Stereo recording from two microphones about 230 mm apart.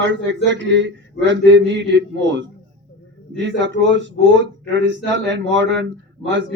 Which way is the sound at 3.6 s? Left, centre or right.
Right.